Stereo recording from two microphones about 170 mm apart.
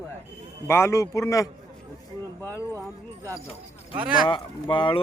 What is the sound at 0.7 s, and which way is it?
Speech, 15° left (ahead or behind).